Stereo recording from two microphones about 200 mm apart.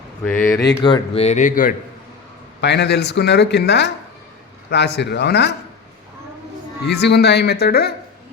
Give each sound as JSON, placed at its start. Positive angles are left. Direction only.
{"t": 0.3, "sound": "speech", "side_deg": 10}
{"t": 2.6, "sound": "speech", "side_deg": 60}
{"t": 6.8, "sound": "speech", "side_deg": 55}